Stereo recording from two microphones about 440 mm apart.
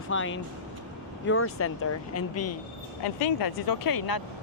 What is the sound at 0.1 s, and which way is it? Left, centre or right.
Speech, left.